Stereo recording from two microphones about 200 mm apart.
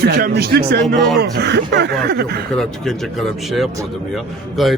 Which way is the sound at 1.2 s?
55° right (ahead or behind).